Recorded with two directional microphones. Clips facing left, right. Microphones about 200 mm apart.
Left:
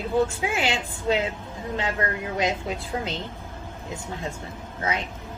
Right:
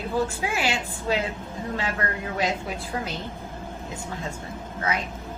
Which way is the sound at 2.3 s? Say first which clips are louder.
Left 1 dB; 20° left (ahead or behind).